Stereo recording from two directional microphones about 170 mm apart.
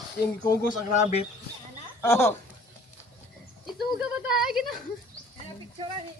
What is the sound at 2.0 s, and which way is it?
Speech, 15° left (ahead or behind).